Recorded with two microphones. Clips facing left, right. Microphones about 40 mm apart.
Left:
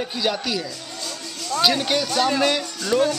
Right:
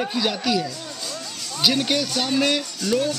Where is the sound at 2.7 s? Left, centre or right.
Left.